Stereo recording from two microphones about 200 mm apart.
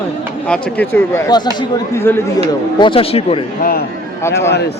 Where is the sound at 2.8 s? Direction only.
25° left (ahead or behind).